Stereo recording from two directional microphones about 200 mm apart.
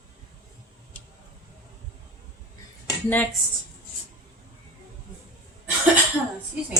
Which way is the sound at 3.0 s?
10° left (ahead or behind).